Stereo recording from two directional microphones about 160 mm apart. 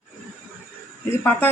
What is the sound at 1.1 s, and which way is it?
Speech, 15° left (ahead or behind).